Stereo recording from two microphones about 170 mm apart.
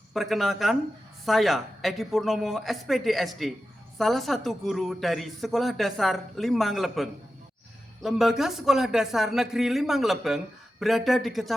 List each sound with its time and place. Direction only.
0.1 s speech: centre (ahead or behind)